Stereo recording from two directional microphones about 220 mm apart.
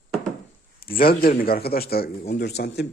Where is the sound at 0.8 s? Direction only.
40° left (ahead or behind).